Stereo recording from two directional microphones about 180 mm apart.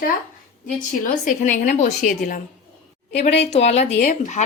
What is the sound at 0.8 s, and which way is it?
A woman's voice, 45° left (ahead or behind).